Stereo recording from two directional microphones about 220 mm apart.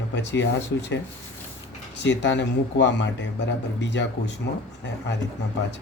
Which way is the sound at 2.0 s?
55° left (ahead or behind).